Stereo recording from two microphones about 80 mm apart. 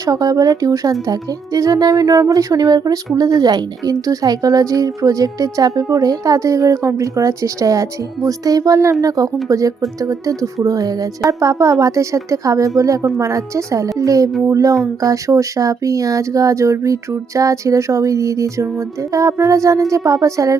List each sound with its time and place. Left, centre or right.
0.0 s a woman's voice: right